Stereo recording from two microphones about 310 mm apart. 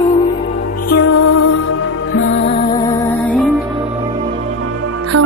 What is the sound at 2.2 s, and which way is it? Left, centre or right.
Music, left.